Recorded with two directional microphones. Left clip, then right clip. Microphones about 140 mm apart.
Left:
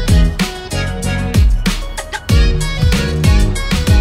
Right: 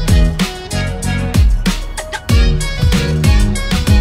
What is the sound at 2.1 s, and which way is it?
Music, centre (ahead or behind).